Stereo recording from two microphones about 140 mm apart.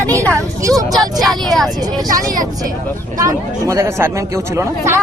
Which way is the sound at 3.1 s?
20° right (ahead or behind).